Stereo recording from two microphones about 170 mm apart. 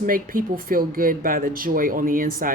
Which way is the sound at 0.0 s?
55° right (ahead or behind).